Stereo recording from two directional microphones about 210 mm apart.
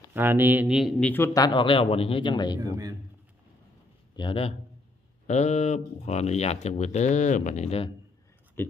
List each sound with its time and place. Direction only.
0.1 s speech: 10° right (ahead or behind); by 2.6 s 20° left (ahead or behind)
2.6 s a man's voice: 15° right (ahead or behind)
4.2 s a man's voice: 25° left (ahead or behind)
8.6 s speech: 10° left (ahead or behind)